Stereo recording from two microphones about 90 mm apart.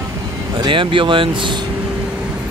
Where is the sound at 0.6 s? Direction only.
70° right (ahead or behind).